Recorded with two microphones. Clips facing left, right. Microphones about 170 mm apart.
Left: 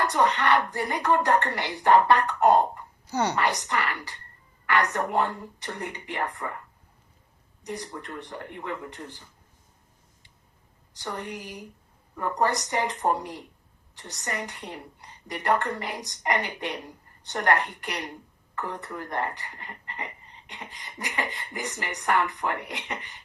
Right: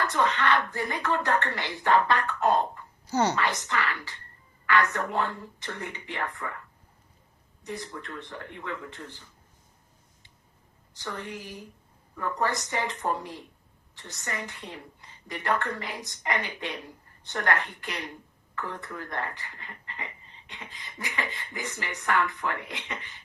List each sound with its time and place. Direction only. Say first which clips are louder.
0.0 s speech: left 2 dB; 15° left (ahead or behind)
7.7 s speech: left 2 dB; 15° left (ahead or behind)
10.9 s speech: left 2 dB; 15° left (ahead or behind)